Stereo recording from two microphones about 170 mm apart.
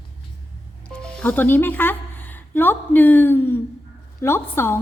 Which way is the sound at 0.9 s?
5° left (ahead or behind).